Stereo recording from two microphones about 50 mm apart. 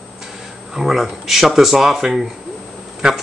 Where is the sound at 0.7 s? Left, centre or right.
Centre.